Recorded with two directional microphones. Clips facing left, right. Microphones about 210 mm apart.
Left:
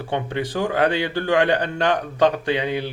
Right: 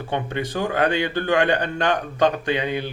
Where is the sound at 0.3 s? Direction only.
30° left (ahead or behind).